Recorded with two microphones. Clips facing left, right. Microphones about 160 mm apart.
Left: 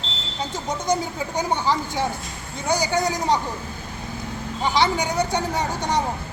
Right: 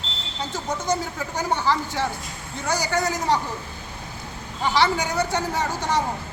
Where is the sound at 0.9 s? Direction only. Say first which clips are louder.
Left 3 dB; 15° left (ahead or behind).